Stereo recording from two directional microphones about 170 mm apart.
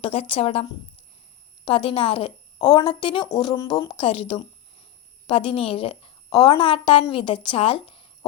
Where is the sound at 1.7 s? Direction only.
35° left (ahead or behind).